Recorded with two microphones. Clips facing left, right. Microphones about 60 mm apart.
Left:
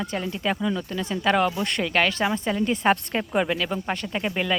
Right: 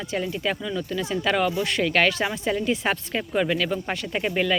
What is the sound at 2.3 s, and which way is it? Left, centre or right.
Speech, centre.